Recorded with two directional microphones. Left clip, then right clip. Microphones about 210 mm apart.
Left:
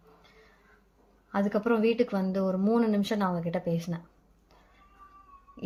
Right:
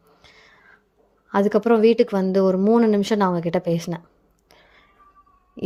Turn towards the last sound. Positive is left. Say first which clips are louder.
# right 13 dB
turn(degrees=-45)  # may be behind; listen again after turning